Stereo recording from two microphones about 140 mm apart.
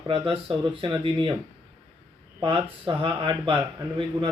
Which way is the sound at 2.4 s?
40° right (ahead or behind).